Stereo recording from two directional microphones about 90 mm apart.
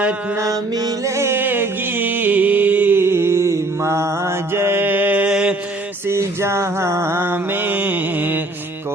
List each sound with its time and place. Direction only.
0.3 s music: 40° right (ahead or behind); by 5.3 s 20° right (ahead or behind)
5.3 s mantra: 10° right (ahead or behind)
6.1 s mantra: 30° right (ahead or behind)